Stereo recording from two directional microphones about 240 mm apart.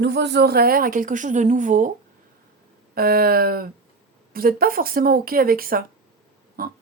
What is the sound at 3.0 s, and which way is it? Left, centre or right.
A woman's voice, right.